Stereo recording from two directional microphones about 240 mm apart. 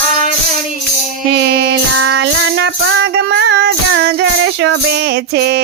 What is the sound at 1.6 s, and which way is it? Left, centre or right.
Music, right.